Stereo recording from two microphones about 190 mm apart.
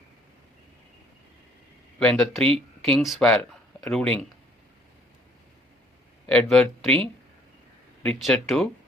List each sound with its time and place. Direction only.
2.0 s speech: 5° left (ahead or behind)
2.5 s speech: 30° right (ahead or behind)
3.0 s speech: centre (ahead or behind)
6.2 s speech: 5° left (ahead or behind)
8.0 s speech: centre (ahead or behind)